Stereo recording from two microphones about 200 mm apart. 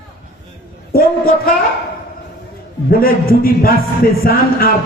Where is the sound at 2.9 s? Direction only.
45° left (ahead or behind).